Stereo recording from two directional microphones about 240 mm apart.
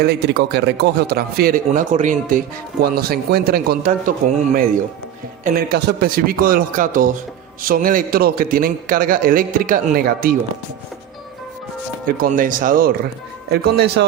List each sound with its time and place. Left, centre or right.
0.0 s a man's voice: right
5.5 s a man's voice: right
12.0 s a man's voice: right